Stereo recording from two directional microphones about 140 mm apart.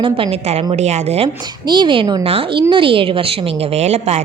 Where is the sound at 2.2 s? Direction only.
45° right (ahead or behind).